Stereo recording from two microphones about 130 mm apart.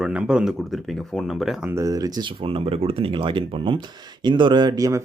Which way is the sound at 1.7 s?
25° right (ahead or behind).